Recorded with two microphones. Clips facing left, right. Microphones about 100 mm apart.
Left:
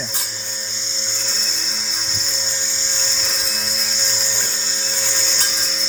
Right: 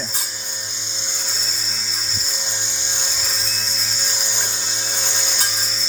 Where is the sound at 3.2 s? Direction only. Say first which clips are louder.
Left 2 dB; centre (ahead or behind).